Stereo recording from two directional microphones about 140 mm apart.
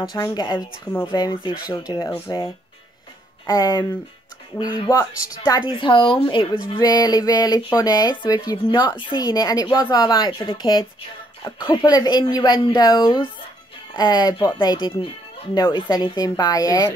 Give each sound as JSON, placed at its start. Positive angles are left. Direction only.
{"t": 0.0, "sound": "speech", "side_deg": 25}
{"t": 2.1, "sound": "speech", "side_deg": 20}
{"t": 3.4, "sound": "speech", "side_deg": 25}